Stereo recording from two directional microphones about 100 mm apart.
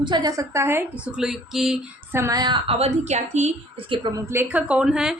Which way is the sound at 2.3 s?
45° right (ahead or behind).